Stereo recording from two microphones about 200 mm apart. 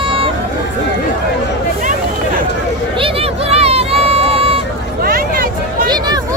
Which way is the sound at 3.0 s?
30° right (ahead or behind).